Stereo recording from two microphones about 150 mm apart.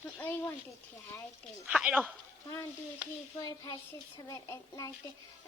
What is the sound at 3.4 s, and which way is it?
A child's voice, 25° left (ahead or behind).